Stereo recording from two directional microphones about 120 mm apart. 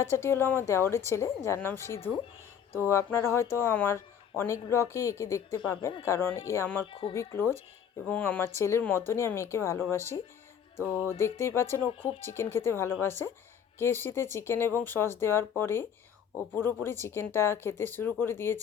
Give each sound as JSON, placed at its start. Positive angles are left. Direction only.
{"t": 0.0, "sound": "speech", "side_deg": 20}
{"t": 6.8, "sound": "speech", "side_deg": 45}
{"t": 7.1, "sound": "speech", "side_deg": 25}
{"t": 10.8, "sound": "music", "side_deg": -20}
{"t": 11.3, "sound": "speech", "side_deg": 20}